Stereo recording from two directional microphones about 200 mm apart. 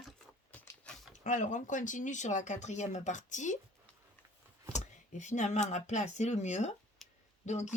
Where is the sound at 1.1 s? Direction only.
40° left (ahead or behind).